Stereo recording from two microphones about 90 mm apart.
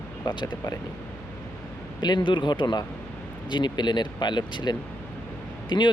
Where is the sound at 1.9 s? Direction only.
55° left (ahead or behind).